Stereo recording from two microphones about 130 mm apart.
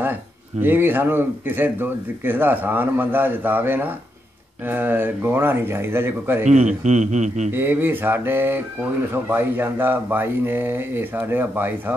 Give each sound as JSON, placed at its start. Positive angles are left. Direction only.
{"t": 0.6, "sound": "speech", "side_deg": -15}
{"t": 6.4, "sound": "a man's voice", "side_deg": -65}
{"t": 7.5, "sound": "speech", "side_deg": -15}